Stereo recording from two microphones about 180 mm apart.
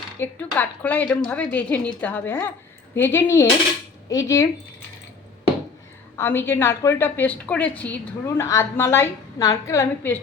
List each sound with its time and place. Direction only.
0.2 s a woman's voice: 10° left (ahead or behind)
6.1 s a woman's voice: 10° left (ahead or behind)